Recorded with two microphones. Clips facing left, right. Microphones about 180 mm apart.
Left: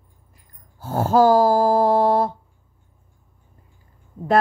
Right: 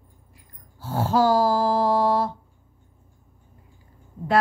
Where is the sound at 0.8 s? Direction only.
50° left (ahead or behind).